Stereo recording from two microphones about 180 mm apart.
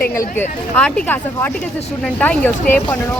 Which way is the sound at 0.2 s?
10° left (ahead or behind).